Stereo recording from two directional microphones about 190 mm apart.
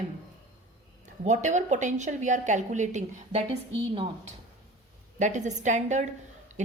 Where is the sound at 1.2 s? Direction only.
40° right (ahead or behind).